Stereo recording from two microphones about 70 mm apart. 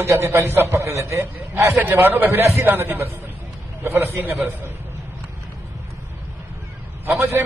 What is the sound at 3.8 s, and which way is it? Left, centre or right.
Speech, right.